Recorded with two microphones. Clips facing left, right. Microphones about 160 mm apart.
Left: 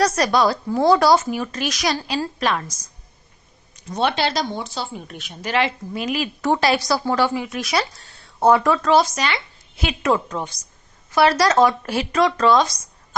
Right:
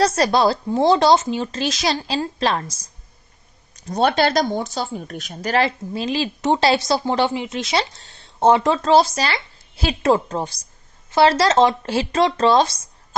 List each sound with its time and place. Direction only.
0.0 s speech: 30° right (ahead or behind)
3.8 s speech: 40° right (ahead or behind)